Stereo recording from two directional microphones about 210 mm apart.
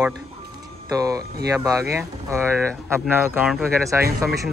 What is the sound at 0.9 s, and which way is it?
Speech, 15° right (ahead or behind).